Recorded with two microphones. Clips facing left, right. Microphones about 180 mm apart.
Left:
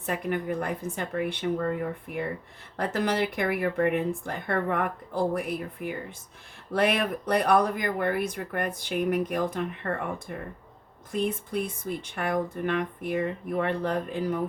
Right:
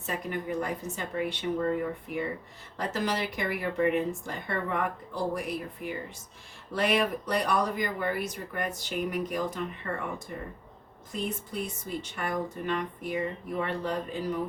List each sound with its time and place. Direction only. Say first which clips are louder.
0.0 s speech: left 4 dB; 55° left (ahead or behind)
2.7 s speech: left 4 dB; 55° left (ahead or behind)